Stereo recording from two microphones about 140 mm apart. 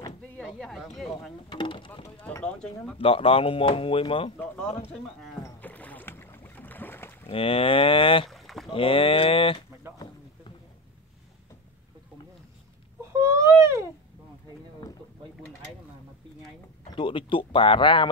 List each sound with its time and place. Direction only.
0.4 s speech: 5° left (ahead or behind)
1.5 s speech: 35° left (ahead or behind)
3.0 s speech: 40° left (ahead or behind)
5.4 s boat: 10° left (ahead or behind)
7.2 s speech: 40° left (ahead or behind)
8.3 s rowboat: centre (ahead or behind)
8.6 s speech: 40° left (ahead or behind)
13.0 s baby cry: 20° right (ahead or behind)
16.9 s speech: 40° left (ahead or behind)